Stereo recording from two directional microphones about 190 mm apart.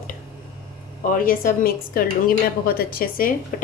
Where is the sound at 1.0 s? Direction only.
45° left (ahead or behind).